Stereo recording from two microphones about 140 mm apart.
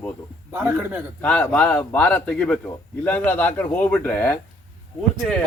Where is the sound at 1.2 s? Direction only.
10° left (ahead or behind).